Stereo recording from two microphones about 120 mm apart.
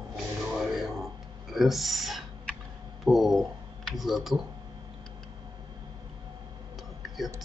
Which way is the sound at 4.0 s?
Centre (ahead or behind).